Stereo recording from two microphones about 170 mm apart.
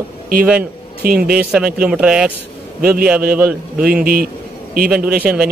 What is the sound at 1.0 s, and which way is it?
Speech, 65° right (ahead or behind).